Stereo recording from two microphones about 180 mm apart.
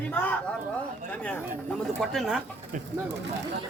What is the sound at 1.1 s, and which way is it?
Chatter, 10° left (ahead or behind).